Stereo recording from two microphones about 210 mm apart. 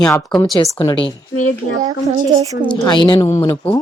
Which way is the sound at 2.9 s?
20° left (ahead or behind).